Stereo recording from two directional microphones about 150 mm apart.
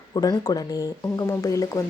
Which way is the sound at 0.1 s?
25° left (ahead or behind).